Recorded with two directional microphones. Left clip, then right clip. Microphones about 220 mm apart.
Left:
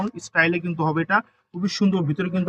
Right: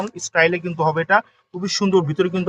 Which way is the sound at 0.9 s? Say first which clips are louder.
Right 5 dB; 40° right (ahead or behind).